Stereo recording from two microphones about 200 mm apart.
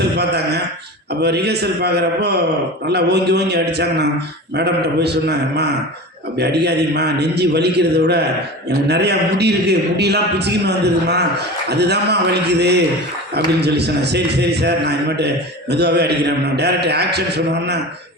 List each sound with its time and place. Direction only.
0.2 s a man's voice: 55° right (ahead or behind)